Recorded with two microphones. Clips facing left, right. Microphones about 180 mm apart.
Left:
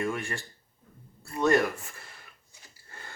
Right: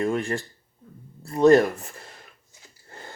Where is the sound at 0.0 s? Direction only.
35° right (ahead or behind).